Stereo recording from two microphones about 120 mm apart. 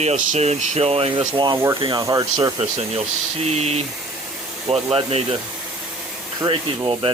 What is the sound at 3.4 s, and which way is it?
Speech, 65° right (ahead or behind).